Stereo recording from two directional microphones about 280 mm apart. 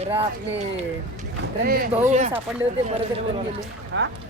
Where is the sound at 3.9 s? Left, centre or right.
Right.